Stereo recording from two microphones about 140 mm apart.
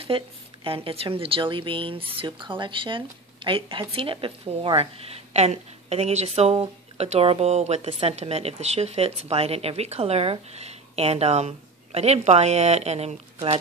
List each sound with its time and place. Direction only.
0.7 s speech: 40° right (ahead or behind)